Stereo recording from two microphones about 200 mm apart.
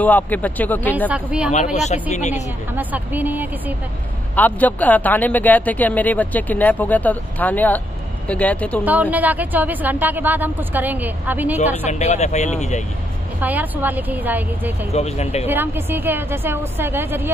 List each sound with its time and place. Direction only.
0.0 s a man's voice: 10° left (ahead or behind)
0.9 s a woman's voice: 5° right (ahead or behind)
1.5 s speech: 35° left (ahead or behind)
2.7 s a woman's voice: 10° right (ahead or behind)
4.4 s a man's voice: 10° left (ahead or behind)
8.8 s a woman's voice: 10° right (ahead or behind)
11.9 s speech: 35° left (ahead or behind)
13.4 s a woman's voice: 10° right (ahead or behind)
14.9 s speech: 30° left (ahead or behind)
15.4 s a woman's voice: 10° right (ahead or behind)